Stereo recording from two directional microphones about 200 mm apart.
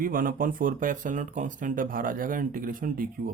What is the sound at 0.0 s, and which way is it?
Speech, 45° right (ahead or behind).